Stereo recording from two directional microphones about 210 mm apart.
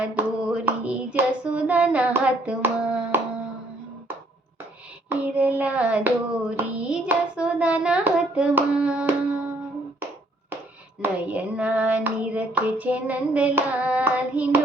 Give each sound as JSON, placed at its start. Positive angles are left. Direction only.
{"t": 0.0, "sound": "a sound", "side_deg": -5}
{"t": 5.0, "sound": "child singing", "side_deg": -5}
{"t": 6.6, "sound": "hands", "side_deg": -5}
{"t": 11.0, "sound": "hands", "side_deg": -5}